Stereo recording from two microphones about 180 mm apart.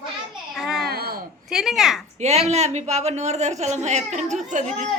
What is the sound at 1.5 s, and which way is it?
Speech, centre (ahead or behind).